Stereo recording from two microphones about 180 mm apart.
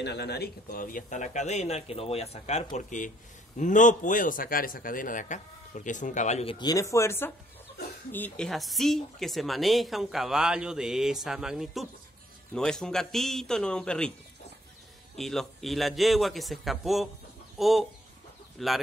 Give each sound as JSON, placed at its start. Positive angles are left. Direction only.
{"t": 0.0, "sound": "a man's voice", "side_deg": 65}
{"t": 15.1, "sound": "speech", "side_deg": 0}